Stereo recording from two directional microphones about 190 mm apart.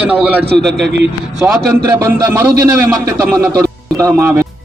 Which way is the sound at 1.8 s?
15° right (ahead or behind).